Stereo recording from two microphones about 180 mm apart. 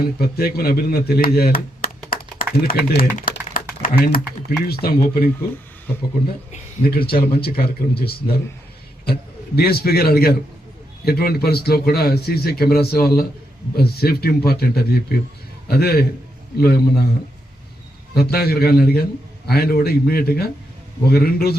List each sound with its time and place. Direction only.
0.0 s a man's voice: 60° left (ahead or behind)
2.0 s typing: 55° left (ahead or behind)
4.6 s a man's voice: 55° left (ahead or behind)
6.8 s a man's voice: 55° left (ahead or behind)
9.6 s a man's voice: 60° left (ahead or behind)
18.1 s a man's voice: 60° left (ahead or behind)